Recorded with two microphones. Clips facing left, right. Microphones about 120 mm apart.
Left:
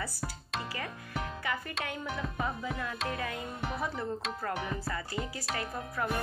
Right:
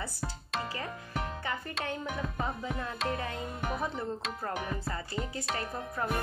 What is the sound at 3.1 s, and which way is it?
Music, 30° right (ahead or behind).